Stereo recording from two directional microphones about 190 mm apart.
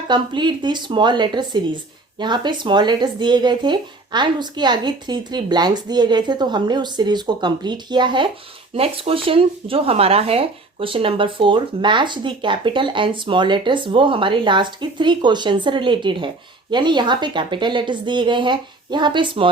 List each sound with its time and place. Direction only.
0.1 s speech: 25° right (ahead or behind)